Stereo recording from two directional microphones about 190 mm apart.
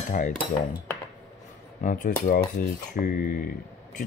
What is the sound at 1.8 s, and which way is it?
Speech, 45° left (ahead or behind).